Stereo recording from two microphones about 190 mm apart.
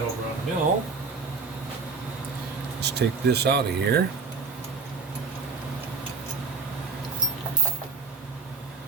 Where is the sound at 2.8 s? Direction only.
60° right (ahead or behind).